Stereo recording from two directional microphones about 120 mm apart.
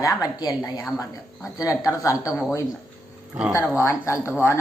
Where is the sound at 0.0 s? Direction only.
30° left (ahead or behind).